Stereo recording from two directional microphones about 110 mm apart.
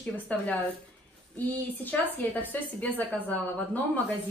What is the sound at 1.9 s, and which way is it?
A woman's voice, 15° left (ahead or behind).